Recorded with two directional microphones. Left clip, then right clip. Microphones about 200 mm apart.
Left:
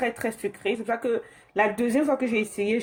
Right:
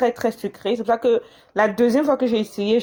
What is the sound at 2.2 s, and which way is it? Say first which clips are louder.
Speech: right 4 dB; centre (ahead or behind).